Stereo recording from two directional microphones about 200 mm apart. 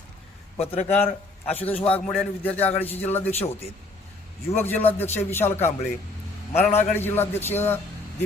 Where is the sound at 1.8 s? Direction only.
10° left (ahead or behind).